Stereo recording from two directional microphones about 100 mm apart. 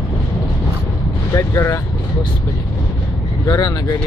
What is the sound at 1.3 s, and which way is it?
Vehicle, 30° left (ahead or behind).